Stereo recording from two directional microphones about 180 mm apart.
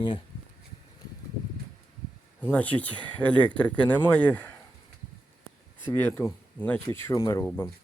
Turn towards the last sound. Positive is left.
turn(degrees=15)  # may be behind; listen again after turning